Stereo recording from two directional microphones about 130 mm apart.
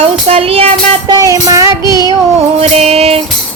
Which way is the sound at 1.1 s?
25° right (ahead or behind).